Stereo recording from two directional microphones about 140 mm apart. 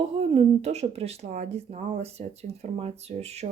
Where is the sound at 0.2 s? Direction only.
50° right (ahead or behind).